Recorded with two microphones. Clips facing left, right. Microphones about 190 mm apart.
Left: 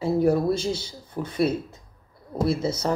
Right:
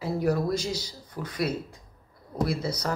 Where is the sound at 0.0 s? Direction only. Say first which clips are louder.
Left 5 dB; 25° left (ahead or behind).